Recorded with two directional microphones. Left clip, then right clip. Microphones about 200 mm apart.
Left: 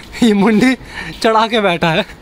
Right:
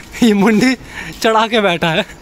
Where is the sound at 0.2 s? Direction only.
Centre (ahead or behind).